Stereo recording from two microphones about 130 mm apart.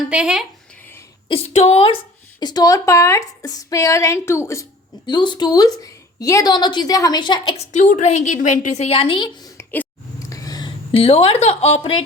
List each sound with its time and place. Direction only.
0.1 s speech: 5° right (ahead or behind)
1.3 s speech: 55° left (ahead or behind)
2.4 s a woman's voice: 30° left (ahead or behind)
5.0 s a woman's voice: 35° left (ahead or behind)
7.6 s a woman's voice: 65° left (ahead or behind); by 9.5 s 40° left (ahead or behind)
9.6 s a sound: 20° left (ahead or behind)
10.9 s speech: 45° left (ahead or behind)